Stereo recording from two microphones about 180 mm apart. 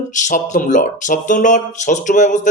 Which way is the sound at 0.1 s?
45° left (ahead or behind).